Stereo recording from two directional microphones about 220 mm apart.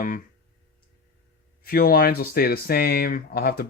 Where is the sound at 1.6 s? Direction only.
45° left (ahead or behind).